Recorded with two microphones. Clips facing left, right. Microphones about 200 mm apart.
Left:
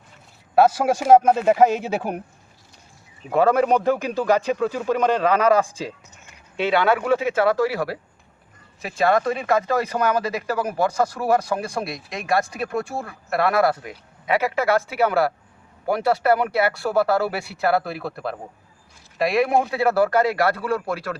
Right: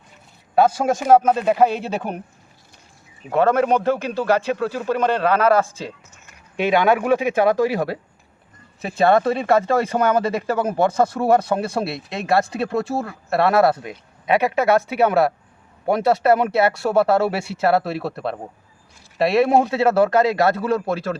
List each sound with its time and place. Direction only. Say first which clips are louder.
0.5 s speech: even; 5° left (ahead or behind)
3.3 s speech: even; 10° left (ahead or behind)
4.6 s speech: even; 5° right (ahead or behind)
6.6 s speech: right 2 dB; 15° right (ahead or behind)